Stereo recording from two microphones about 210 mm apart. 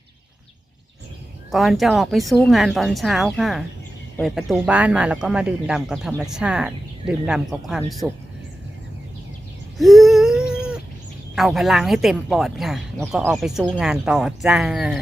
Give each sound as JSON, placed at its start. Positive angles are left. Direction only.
{"t": 1.5, "sound": "speech", "side_deg": 0}
{"t": 9.7, "sound": "a sound", "side_deg": 0}
{"t": 11.3, "sound": "speech", "side_deg": 0}